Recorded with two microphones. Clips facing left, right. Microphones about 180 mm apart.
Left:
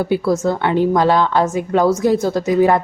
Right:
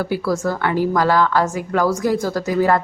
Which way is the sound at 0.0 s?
25° left (ahead or behind).